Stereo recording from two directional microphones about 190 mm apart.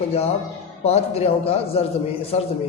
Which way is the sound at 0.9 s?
35° left (ahead or behind).